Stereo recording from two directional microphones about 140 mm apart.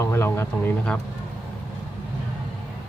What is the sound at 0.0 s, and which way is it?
Speech, 20° left (ahead or behind).